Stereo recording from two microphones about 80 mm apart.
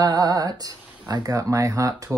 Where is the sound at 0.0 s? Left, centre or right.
Right.